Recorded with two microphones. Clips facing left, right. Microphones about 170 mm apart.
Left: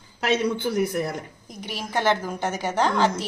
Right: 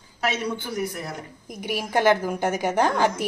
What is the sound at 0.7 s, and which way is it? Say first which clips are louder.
Speech: left 5 dB; 60° left (ahead or behind).